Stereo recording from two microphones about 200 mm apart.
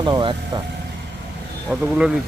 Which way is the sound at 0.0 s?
25° right (ahead or behind).